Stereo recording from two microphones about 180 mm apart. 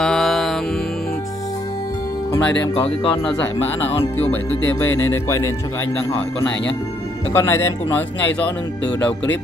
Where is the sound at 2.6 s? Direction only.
30° left (ahead or behind).